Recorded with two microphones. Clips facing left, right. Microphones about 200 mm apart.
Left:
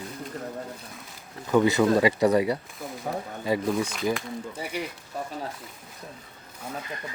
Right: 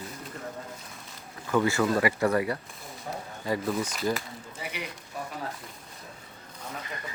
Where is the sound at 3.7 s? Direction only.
5° right (ahead or behind).